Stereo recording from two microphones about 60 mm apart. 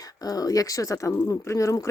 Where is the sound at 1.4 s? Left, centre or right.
Left.